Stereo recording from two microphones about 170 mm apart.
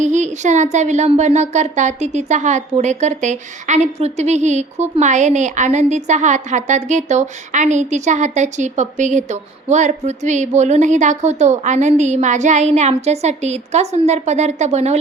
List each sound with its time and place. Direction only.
0.0 s speech: 45° right (ahead or behind)